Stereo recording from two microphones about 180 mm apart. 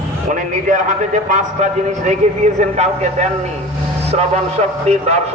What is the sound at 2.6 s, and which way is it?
Speech, 40° right (ahead or behind).